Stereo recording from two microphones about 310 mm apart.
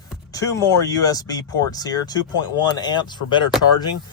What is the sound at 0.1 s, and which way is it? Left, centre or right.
Speech, centre.